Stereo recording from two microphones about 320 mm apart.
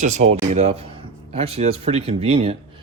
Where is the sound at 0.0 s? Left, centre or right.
Right.